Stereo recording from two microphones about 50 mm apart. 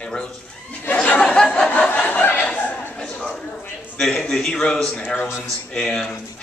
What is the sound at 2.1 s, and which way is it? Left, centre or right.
Speech, left.